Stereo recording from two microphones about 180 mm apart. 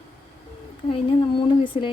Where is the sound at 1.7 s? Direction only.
35° left (ahead or behind).